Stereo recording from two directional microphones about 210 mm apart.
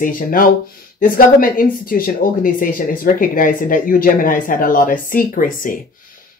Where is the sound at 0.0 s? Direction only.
40° left (ahead or behind).